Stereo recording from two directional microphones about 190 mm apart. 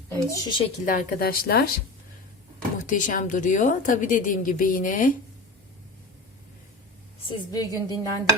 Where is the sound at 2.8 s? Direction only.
45° left (ahead or behind).